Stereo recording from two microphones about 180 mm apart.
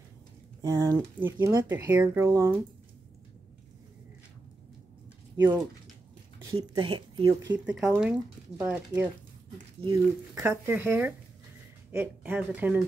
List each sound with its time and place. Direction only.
0.6 s speech: 15° right (ahead or behind)
5.4 s speech: 10° right (ahead or behind)
6.7 s speech: 30° right (ahead or behind)
7.5 s speech: 5° right (ahead or behind)
10.3 s speech: 10° right (ahead or behind)